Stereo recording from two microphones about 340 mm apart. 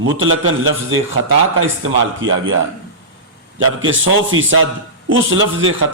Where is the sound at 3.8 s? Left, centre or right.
Right.